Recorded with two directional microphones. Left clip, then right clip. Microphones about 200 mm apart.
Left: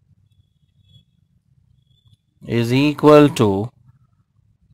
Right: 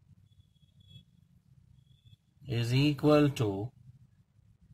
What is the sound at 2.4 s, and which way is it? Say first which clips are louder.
Speech: left 13 dB; 40° left (ahead or behind).